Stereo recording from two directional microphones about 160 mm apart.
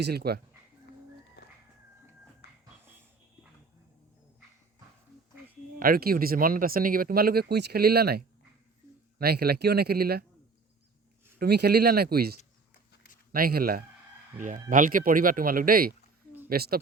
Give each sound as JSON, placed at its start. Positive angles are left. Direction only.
{"t": 0.0, "sound": "speech", "side_deg": -85}
{"t": 1.4, "sound": "a sound", "side_deg": 90}
{"t": 5.8, "sound": "speech", "side_deg": -65}
{"t": 11.3, "sound": "speech", "side_deg": -85}
{"t": 14.3, "sound": "speech", "side_deg": -55}